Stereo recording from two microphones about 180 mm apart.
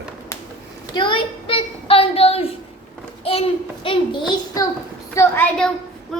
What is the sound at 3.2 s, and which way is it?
Child singing, 30° left (ahead or behind).